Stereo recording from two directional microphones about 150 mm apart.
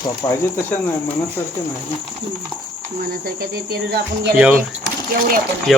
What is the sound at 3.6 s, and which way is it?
Speech, 90° right.